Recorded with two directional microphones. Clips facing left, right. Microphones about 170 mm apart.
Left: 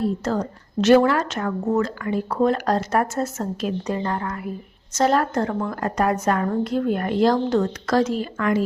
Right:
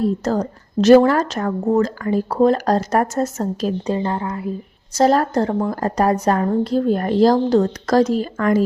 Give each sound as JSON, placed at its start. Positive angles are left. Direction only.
{"t": 0.0, "sound": "a woman's voice", "side_deg": -40}
{"t": 4.9, "sound": "a woman's voice", "side_deg": -35}